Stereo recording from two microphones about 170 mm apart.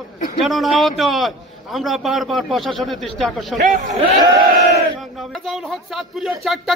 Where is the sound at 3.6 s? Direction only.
45° right (ahead or behind).